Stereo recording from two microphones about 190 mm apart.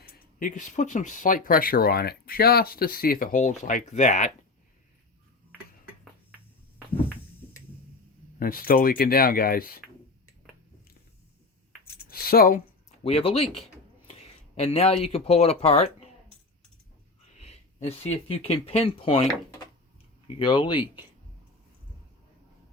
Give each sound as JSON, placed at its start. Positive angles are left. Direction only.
{"t": 0.1, "sound": "speech", "side_deg": 45}
{"t": 8.4, "sound": "speech", "side_deg": 50}
{"t": 12.2, "sound": "speech", "side_deg": 50}
{"t": 13.0, "sound": "speech", "side_deg": 30}
{"t": 17.3, "sound": "speech", "side_deg": 35}
{"t": 20.4, "sound": "speech", "side_deg": 25}